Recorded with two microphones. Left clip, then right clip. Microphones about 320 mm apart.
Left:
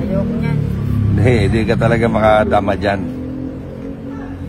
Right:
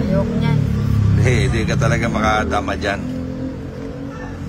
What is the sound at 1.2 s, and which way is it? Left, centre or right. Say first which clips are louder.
Speech: left 5 dB; centre.